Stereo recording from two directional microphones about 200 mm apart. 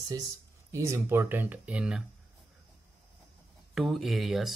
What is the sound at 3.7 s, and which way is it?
Speech, centre (ahead or behind).